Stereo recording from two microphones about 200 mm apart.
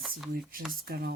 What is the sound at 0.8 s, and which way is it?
Speech, 50° right (ahead or behind).